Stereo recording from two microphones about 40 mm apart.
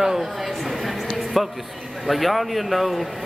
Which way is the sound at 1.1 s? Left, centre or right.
Centre.